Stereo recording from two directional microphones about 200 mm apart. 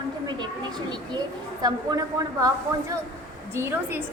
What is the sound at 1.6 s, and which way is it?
A woman's voice, 20° right (ahead or behind).